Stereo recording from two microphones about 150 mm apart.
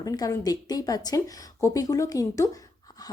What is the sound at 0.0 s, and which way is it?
A woman's voice, 25° left (ahead or behind).